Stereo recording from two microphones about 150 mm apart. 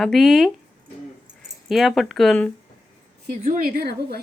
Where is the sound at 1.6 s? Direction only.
Centre (ahead or behind).